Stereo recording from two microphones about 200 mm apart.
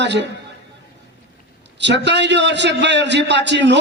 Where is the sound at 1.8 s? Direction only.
60° right (ahead or behind).